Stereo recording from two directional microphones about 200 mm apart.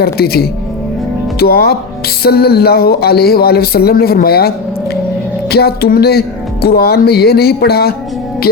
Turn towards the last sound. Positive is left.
turn(degrees=50)  # may be behind; listen again after turning